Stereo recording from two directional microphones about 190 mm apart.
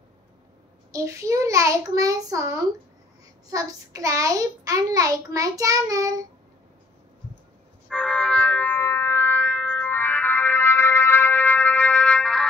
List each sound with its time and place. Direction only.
0.9 s a child's voice: 15° right (ahead or behind)
7.9 s music: 5° left (ahead or behind)